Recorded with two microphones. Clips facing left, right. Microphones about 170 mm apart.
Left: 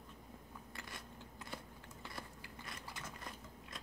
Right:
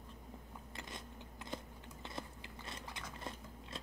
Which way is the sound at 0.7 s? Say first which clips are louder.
Right 3 dB; 20° right (ahead or behind).